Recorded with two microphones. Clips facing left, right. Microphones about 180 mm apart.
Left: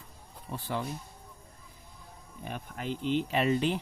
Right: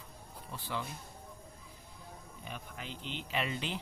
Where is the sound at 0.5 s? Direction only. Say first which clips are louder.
Left 5 dB; 50° left (ahead or behind).